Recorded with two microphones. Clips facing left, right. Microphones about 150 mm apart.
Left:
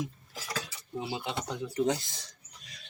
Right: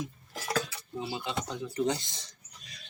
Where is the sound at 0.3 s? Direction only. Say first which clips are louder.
Right 7 dB; 55° right (ahead or behind).